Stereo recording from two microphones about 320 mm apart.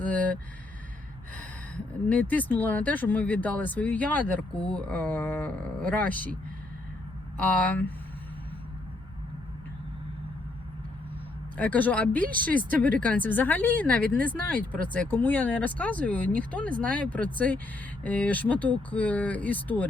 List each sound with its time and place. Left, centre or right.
0.0 s a sound: centre
2.0 s speech: centre
7.3 s speech: centre
11.5 s speech: centre
12.2 s speech: right
12.8 s speech: centre
14.0 s speech: right
14.9 s speech: centre